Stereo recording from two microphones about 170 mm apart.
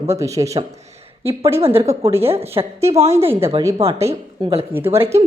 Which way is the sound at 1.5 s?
35° right (ahead or behind).